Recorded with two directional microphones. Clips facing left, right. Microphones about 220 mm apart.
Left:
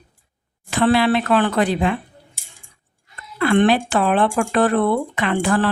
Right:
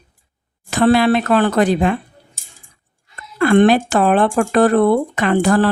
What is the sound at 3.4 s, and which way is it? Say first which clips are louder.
A woman's voice: right 4 dB; 45° right (ahead or behind).